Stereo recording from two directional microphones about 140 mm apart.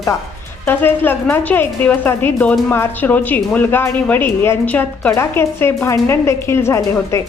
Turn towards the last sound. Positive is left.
turn(degrees=20)  # may be behind; listen again after turning